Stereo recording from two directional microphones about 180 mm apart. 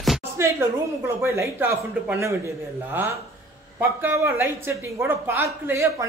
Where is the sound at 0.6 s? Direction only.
15° right (ahead or behind).